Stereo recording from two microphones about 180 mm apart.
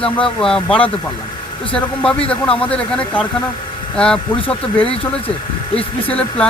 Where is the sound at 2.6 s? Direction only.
5° left (ahead or behind).